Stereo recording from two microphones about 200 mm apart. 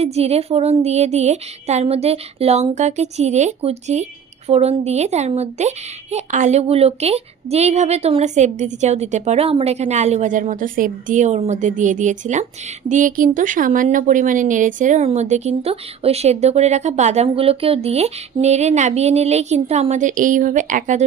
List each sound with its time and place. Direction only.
0.0 s speech: 30° right (ahead or behind)